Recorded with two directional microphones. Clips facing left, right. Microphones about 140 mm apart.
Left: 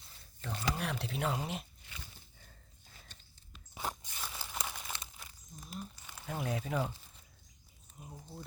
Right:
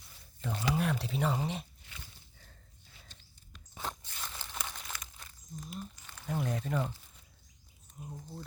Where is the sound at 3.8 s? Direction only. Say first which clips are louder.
Left 1 dB; 15° left (ahead or behind).